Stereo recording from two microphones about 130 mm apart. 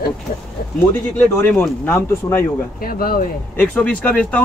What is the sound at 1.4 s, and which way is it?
Speech, 15° left (ahead or behind).